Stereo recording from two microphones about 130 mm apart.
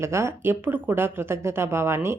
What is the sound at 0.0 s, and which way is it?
Speech, 20° right (ahead or behind).